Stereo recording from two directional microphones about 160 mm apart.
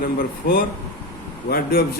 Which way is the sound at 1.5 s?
70° left (ahead or behind).